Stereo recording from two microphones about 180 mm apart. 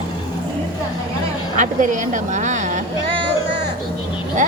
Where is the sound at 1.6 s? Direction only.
45° right (ahead or behind).